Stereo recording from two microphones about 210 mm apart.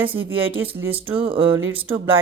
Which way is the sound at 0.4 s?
10° right (ahead or behind).